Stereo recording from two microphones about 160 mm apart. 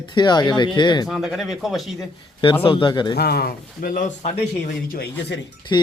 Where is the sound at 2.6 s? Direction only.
30° left (ahead or behind).